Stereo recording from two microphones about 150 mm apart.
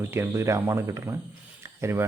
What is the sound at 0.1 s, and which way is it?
A man's voice, 15° right (ahead or behind).